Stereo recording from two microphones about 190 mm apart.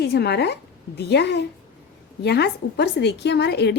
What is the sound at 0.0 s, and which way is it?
A woman's voice, 60° left (ahead or behind).